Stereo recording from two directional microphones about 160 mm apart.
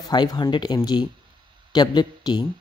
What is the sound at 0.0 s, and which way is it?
Speech, 25° left (ahead or behind).